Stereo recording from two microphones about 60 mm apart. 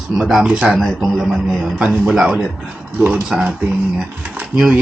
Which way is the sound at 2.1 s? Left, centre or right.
Centre.